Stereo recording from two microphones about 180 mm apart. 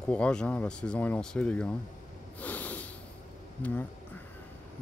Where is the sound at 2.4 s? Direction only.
10° left (ahead or behind).